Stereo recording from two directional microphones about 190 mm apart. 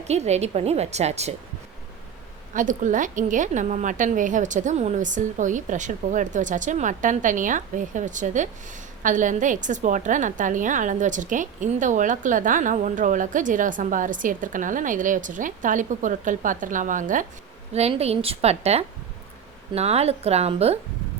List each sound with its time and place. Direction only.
0.1 s a woman's voice: 35° right (ahead or behind)
2.5 s a woman's voice: 45° right (ahead or behind)